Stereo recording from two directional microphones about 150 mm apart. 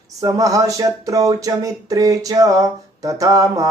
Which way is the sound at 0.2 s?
25° right (ahead or behind).